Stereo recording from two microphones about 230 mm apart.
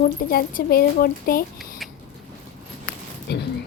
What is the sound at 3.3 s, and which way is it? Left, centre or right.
Speech, left.